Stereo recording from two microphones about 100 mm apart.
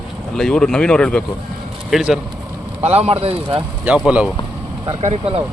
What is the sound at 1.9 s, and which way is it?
Speech, 5° right (ahead or behind).